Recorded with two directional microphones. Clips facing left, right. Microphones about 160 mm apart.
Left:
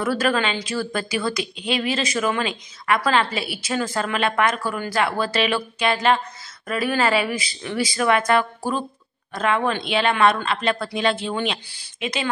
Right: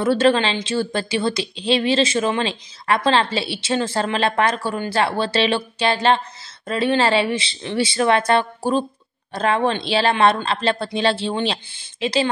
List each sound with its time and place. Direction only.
0.0 s a woman's voice: 25° right (ahead or behind)